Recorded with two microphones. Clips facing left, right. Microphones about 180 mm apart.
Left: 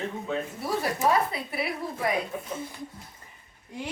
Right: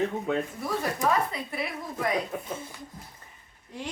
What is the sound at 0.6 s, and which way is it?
Speech, 10° left (ahead or behind).